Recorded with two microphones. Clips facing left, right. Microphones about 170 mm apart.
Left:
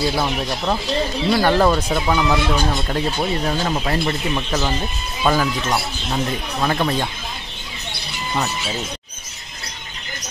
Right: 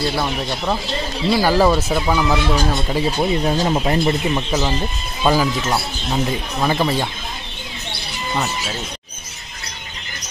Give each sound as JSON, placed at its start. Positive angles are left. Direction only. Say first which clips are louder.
{"t": 0.0, "sound": "speech", "louder": "left 1 dB", "side_deg": 0}
{"t": 3.6, "sound": "speech", "louder": "right 4 dB", "side_deg": -20}